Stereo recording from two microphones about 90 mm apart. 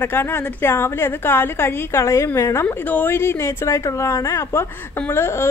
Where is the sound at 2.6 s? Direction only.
20° left (ahead or behind).